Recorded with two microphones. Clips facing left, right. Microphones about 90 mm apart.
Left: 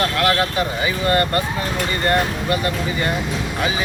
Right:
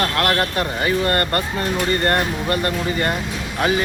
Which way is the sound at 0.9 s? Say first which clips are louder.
Even; 55° right (ahead or behind).